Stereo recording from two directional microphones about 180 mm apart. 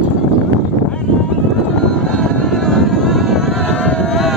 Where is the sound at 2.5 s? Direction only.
Centre (ahead or behind).